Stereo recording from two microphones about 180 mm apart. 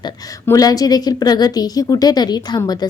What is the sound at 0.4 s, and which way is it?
A woman's voice, 20° left (ahead or behind).